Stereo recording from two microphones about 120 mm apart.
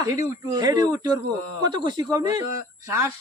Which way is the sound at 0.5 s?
30° right (ahead or behind).